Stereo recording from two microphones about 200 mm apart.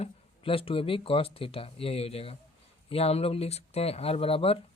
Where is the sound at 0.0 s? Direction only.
30° left (ahead or behind).